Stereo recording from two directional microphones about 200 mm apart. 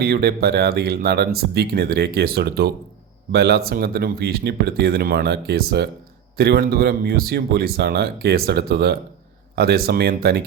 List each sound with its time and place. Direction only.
0.0 s speech: 50° right (ahead or behind)